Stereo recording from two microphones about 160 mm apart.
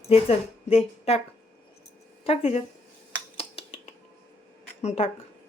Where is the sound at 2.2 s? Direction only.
40° left (ahead or behind).